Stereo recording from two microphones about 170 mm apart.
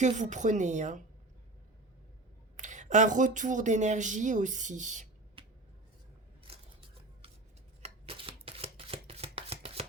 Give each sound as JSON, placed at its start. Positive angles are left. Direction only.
{"t": 0.0, "sound": "speech", "side_deg": -45}
{"t": 2.6, "sound": "speech", "side_deg": -45}
{"t": 5.4, "sound": "a sound", "side_deg": -30}
{"t": 7.8, "sound": "shuffling cards", "side_deg": -35}